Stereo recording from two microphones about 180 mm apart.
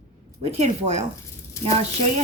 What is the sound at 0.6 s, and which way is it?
Speech, 40° right (ahead or behind).